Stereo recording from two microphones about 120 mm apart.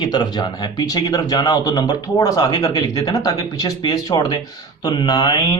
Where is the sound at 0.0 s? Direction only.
35° left (ahead or behind).